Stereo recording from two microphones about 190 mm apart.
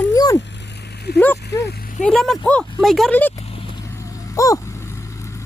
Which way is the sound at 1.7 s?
50° left (ahead or behind).